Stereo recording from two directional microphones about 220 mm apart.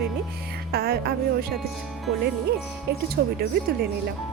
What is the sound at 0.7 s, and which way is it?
Music, 45° right (ahead or behind).